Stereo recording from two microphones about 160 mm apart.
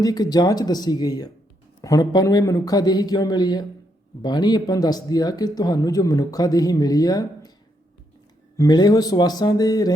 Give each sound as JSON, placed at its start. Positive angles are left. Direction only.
{"t": 0.0, "sound": "speech", "side_deg": 25}
{"t": 8.5, "sound": "speech", "side_deg": 25}